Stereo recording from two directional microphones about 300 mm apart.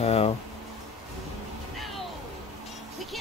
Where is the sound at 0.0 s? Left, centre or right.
Centre.